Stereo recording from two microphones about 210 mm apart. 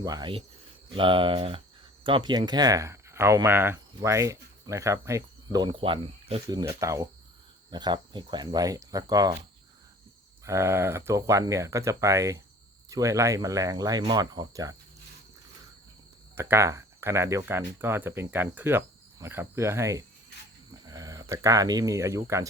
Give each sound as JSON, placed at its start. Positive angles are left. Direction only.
{"t": 0.0, "sound": "speech", "side_deg": -20}
{"t": 6.6, "sound": "speech", "side_deg": -15}
{"t": 10.4, "sound": "speech", "side_deg": -15}
{"t": 16.3, "sound": "speech", "side_deg": -10}